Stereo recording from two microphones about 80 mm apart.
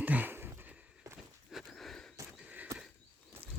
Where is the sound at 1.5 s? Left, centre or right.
Centre.